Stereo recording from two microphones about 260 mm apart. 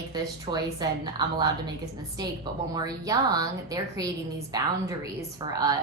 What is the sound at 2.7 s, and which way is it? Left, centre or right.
A woman's voice, centre.